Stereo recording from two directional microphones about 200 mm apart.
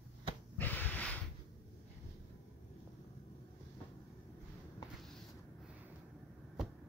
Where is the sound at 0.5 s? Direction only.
10° left (ahead or behind).